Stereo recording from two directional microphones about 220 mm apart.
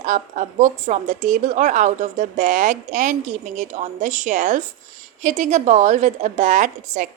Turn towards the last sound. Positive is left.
turn(degrees=-35)  # may be behind; listen again after turning